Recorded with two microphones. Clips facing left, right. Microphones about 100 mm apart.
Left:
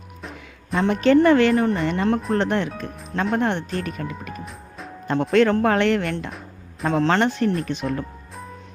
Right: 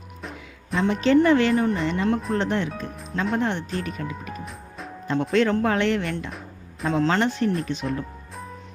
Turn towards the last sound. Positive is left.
turn(degrees=55)  # may be behind; listen again after turning